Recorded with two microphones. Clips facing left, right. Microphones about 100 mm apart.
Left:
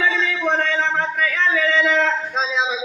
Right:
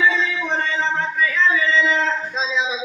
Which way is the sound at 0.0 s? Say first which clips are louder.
Even; 60° left (ahead or behind).